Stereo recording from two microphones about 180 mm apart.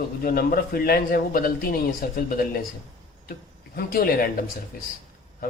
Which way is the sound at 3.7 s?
55° left (ahead or behind).